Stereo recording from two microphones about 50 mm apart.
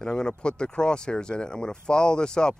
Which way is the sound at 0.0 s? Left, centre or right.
Centre.